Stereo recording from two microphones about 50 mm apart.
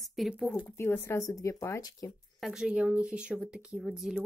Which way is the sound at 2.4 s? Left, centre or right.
Centre.